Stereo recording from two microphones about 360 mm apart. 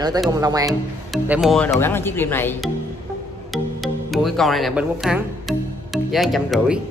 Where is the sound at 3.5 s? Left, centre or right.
Centre.